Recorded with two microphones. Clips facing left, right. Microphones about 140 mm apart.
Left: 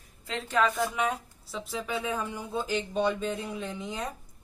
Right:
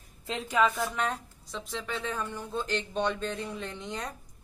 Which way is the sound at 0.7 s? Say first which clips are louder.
Left 2 dB; centre (ahead or behind).